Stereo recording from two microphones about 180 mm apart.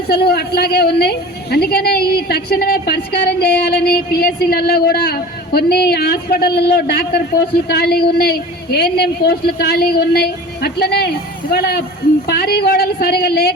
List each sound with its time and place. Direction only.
0.1 s a woman's voice: 60° left (ahead or behind)